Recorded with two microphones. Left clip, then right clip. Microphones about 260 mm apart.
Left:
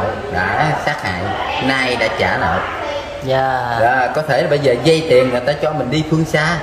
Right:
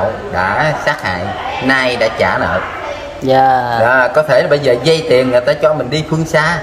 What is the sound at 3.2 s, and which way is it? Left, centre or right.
Speech, right.